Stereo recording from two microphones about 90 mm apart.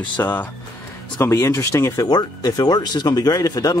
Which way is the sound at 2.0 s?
45° left (ahead or behind).